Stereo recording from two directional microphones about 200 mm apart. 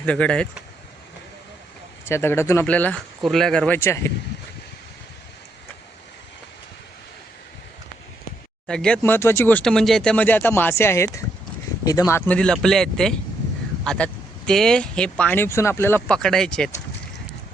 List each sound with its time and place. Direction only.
0.0 s speech: 5° left (ahead or behind)
2.0 s speech: 10° left (ahead or behind)
8.6 s speech: 5° left (ahead or behind)
12.3 s speech: 5° left (ahead or behind)